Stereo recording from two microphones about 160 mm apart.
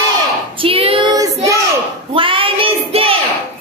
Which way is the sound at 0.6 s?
35° right (ahead or behind).